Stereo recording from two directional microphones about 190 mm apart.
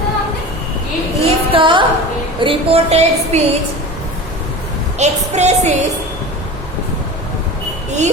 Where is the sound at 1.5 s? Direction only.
25° right (ahead or behind).